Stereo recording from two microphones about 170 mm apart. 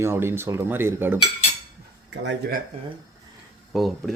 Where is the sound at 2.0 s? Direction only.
90° right.